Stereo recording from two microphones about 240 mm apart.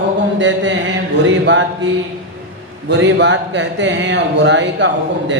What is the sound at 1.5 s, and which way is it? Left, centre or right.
Speech, right.